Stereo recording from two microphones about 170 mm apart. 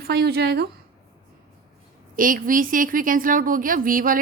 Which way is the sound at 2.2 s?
55° right (ahead or behind).